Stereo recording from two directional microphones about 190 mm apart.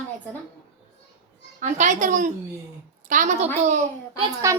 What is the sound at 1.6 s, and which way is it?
A woman's voice, 40° right (ahead or behind).